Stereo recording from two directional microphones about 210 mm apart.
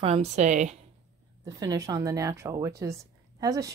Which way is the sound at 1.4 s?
15° right (ahead or behind).